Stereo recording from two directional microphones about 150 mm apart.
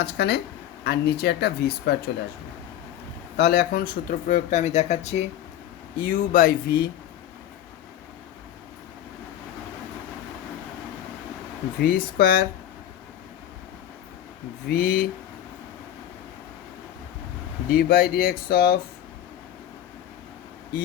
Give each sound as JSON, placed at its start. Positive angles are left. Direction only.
{"t": 0.0, "sound": "speech", "side_deg": 90}
{"t": 3.3, "sound": "speech", "side_deg": 90}
{"t": 6.0, "sound": "speech", "side_deg": 70}
{"t": 11.8, "sound": "speech", "side_deg": 85}
{"t": 14.7, "sound": "speech", "side_deg": 90}
{"t": 17.7, "sound": "speech", "side_deg": 90}